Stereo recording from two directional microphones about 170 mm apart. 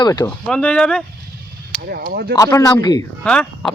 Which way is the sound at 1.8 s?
65° right (ahead or behind).